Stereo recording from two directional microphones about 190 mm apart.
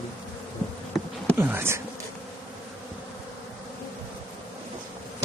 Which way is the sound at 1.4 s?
10° right (ahead or behind).